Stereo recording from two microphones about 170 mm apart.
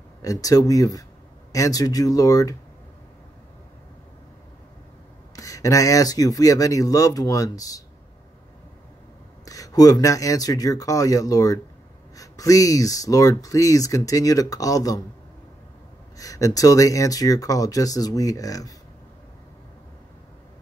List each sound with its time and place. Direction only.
0.2 s speech: 20° left (ahead or behind)
5.3 s speech: 20° left (ahead or behind)
9.4 s speech: 20° left (ahead or behind)
16.2 s speech: 20° left (ahead or behind)